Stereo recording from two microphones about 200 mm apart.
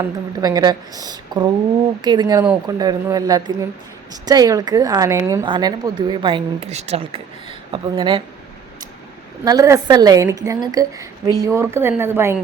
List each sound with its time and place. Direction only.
0.0 s a woman's voice: 20° right (ahead or behind)
9.4 s a woman's voice: 15° right (ahead or behind)